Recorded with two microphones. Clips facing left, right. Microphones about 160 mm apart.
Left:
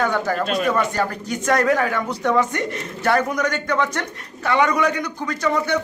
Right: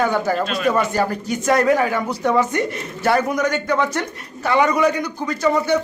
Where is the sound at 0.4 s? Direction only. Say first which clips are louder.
Right 1 dB; 45° left (ahead or behind).